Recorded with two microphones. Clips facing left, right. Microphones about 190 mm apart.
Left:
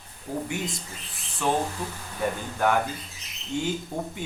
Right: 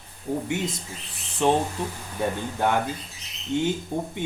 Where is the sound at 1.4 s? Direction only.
25° right (ahead or behind).